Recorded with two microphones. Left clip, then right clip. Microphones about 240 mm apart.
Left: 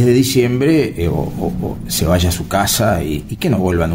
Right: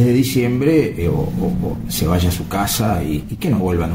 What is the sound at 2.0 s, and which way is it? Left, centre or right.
Speech, left.